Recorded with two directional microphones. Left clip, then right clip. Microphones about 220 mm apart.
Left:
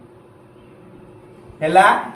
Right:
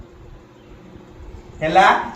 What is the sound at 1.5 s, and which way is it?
Speech, 10° left (ahead or behind).